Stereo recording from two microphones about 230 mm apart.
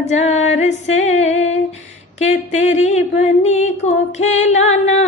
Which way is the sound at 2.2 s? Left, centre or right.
Left.